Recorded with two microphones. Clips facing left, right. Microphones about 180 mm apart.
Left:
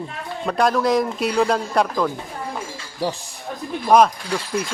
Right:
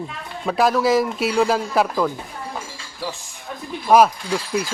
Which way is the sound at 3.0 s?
35° left (ahead or behind).